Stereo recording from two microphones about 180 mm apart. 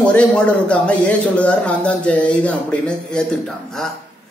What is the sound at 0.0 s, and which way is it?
Speech, 5° left (ahead or behind).